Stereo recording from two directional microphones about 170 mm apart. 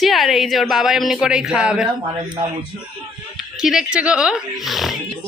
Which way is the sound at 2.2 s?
35° right (ahead or behind).